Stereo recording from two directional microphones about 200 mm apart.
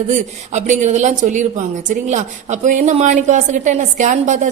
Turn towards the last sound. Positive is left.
turn(degrees=-35)  # may be behind; listen again after turning